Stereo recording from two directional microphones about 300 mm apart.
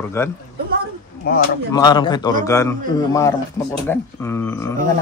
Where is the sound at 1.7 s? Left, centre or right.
Centre.